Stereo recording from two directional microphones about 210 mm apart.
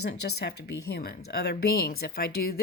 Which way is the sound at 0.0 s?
50° left (ahead or behind).